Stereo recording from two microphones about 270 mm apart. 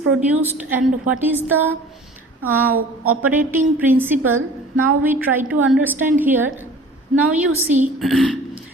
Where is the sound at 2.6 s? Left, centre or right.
Right.